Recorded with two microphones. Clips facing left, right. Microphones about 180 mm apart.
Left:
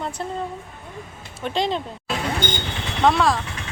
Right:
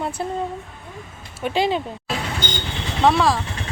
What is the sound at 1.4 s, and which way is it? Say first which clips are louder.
Speech: right 3 dB; 5° right (ahead or behind).